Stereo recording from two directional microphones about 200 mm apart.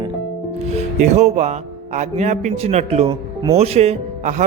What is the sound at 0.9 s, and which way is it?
A man's voice, 35° right (ahead or behind).